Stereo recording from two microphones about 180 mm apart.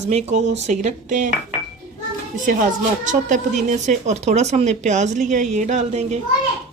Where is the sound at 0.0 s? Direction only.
40° right (ahead or behind).